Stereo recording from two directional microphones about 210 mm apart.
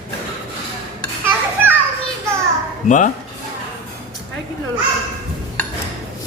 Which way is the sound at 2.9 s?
35° left (ahead or behind).